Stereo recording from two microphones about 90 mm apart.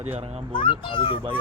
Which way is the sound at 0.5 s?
65° left (ahead or behind).